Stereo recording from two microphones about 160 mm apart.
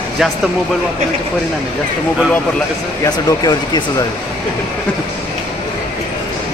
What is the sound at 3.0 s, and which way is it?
Speech, 25° left (ahead or behind).